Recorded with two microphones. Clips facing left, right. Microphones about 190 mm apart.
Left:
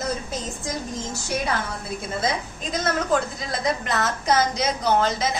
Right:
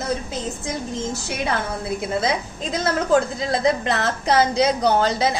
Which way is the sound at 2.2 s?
30° right (ahead or behind).